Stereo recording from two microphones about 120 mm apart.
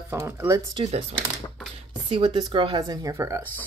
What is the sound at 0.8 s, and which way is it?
Speech, 45° right (ahead or behind).